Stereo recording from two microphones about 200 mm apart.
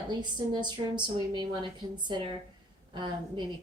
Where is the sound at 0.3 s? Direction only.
20° right (ahead or behind).